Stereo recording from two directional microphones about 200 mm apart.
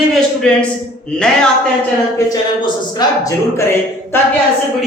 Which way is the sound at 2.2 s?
20° left (ahead or behind).